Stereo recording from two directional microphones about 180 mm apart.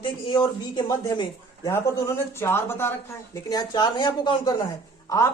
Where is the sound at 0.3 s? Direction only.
25° left (ahead or behind).